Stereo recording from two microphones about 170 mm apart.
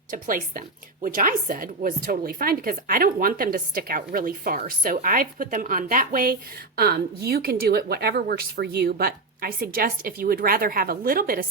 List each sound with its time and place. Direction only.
0.1 s a woman's voice: 55° right (ahead or behind)
6.7 s speech: 65° right (ahead or behind)